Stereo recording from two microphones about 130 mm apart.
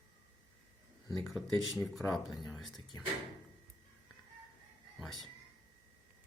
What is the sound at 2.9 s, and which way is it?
Speech, 25° left (ahead or behind).